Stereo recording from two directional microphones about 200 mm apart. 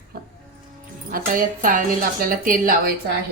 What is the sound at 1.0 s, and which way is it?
Speech, 45° right (ahead or behind).